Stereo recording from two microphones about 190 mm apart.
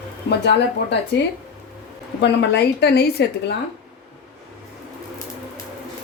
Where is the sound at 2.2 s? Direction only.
65° left (ahead or behind).